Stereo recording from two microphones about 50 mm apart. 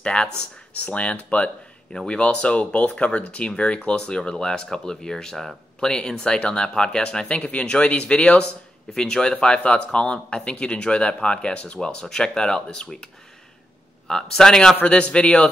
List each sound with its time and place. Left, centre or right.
0.0 s speech: left
14.0 s speech: centre